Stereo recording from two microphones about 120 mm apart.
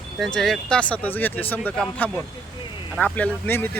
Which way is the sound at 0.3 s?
5° left (ahead or behind).